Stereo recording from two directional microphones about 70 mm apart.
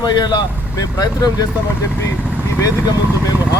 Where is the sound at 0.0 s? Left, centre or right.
Left.